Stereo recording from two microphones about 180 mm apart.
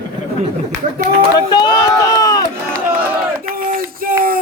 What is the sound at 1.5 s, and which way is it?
Speech, 25° left (ahead or behind).